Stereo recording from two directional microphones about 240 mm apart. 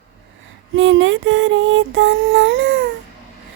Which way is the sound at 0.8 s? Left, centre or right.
Right.